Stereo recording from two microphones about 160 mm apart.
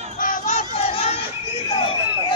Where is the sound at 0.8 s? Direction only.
35° left (ahead or behind).